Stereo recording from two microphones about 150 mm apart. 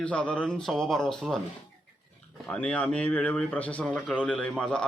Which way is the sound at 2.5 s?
10° left (ahead or behind).